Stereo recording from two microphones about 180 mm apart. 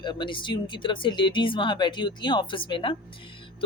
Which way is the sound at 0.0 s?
25° left (ahead or behind).